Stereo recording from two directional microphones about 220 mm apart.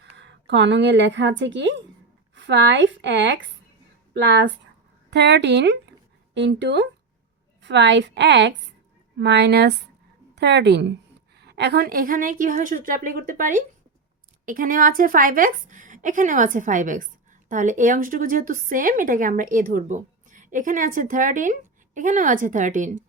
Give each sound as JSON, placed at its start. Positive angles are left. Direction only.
{"t": 0.0, "sound": "a woman's voice", "side_deg": -55}